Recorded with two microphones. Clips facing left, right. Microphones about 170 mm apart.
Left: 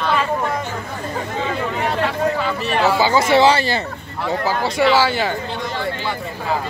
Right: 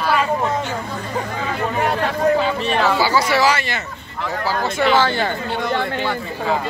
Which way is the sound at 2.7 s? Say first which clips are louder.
Left 3 dB; 15° left (ahead or behind).